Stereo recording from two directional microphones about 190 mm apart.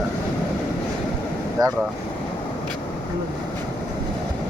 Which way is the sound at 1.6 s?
20° right (ahead or behind).